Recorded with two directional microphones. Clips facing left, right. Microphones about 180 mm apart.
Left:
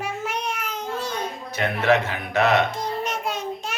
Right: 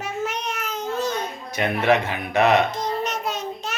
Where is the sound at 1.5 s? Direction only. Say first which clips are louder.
Right 1 dB; 15° right (ahead or behind).